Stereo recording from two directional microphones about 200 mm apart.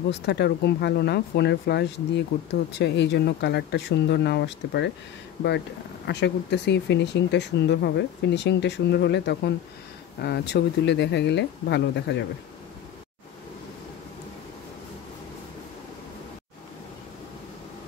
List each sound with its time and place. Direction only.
0.1 s speech: 55° left (ahead or behind)
6.0 s speech: 60° left (ahead or behind)